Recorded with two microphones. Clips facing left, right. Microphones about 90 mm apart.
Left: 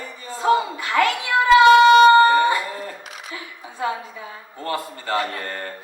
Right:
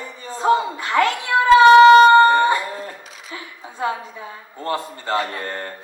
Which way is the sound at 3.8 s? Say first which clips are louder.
Right 1 dB; 25° right (ahead or behind).